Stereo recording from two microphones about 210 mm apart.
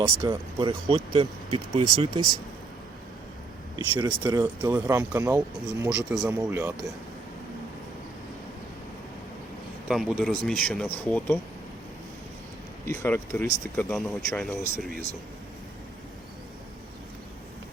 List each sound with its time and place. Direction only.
0.0 s speech: 20° right (ahead or behind)
3.8 s speech: 15° right (ahead or behind)
9.9 s speech: centre (ahead or behind)
12.9 s speech: 10° left (ahead or behind)